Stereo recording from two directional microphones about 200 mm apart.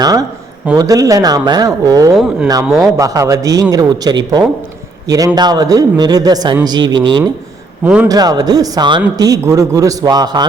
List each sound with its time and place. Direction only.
0.0 s a man's voice: 20° right (ahead or behind)
2.1 s speech: centre (ahead or behind)
3.0 s a man's voice: 15° right (ahead or behind)